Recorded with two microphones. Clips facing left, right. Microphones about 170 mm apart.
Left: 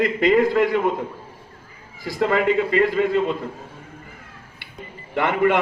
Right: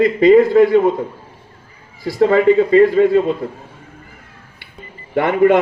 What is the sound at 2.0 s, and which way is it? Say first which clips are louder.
A man's voice: right 8 dB; 35° right (ahead or behind).